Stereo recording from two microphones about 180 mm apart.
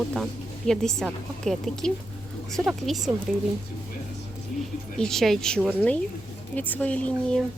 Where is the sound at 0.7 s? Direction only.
5° left (ahead or behind).